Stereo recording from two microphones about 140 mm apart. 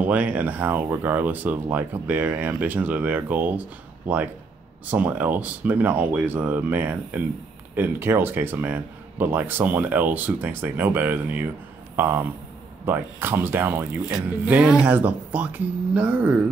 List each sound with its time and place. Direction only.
0.0 s a man's voice: 10° right (ahead or behind)